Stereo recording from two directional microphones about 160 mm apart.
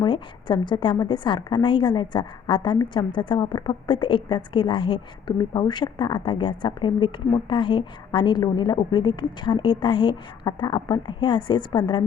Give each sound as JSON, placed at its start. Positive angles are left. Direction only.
{"t": 0.0, "sound": "a woman's voice", "side_deg": 30}